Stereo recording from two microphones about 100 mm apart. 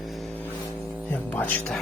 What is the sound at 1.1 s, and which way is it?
Music, 15° left (ahead or behind).